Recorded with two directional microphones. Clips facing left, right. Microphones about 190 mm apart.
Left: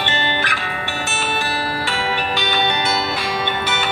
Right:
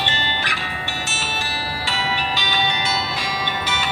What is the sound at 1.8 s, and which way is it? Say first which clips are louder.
Music: left 3 dB; 55° left (ahead or behind).